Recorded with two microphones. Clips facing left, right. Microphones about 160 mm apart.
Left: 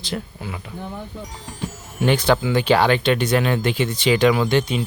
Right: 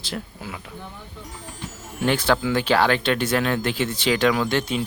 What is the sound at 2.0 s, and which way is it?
Speech, centre (ahead or behind).